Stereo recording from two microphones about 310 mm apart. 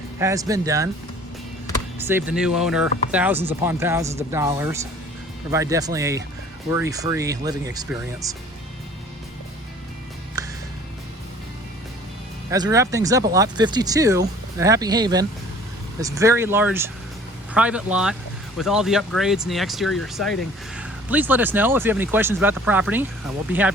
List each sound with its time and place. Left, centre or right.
0.2 s speech: centre
2.0 s speech: centre
10.4 s music: centre
12.5 s speech: centre